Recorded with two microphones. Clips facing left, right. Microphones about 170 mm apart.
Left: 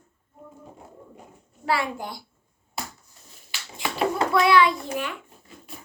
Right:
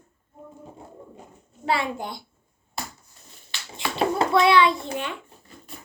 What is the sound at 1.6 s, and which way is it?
Speech, 25° right (ahead or behind).